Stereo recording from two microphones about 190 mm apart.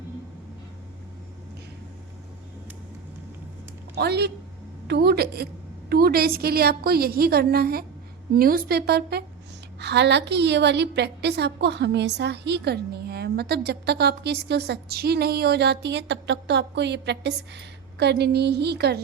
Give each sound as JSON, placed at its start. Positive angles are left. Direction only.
{"t": 3.9, "sound": "a woman's voice", "side_deg": -60}